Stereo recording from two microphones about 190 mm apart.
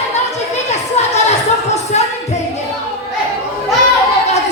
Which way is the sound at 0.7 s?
35° left (ahead or behind).